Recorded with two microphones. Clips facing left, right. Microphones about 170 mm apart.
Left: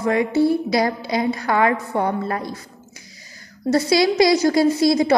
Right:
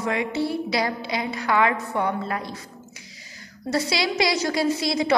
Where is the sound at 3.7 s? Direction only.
45° left (ahead or behind).